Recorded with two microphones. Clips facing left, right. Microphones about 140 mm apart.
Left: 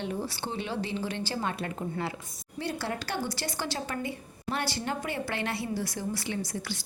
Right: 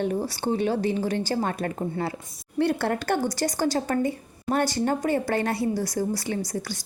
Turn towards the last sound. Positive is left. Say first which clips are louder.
# right 5 dB
turn(degrees=-40)  # may be behind; listen again after turning